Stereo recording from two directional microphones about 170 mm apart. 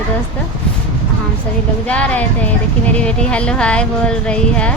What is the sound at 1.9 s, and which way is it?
Speech, 10° left (ahead or behind).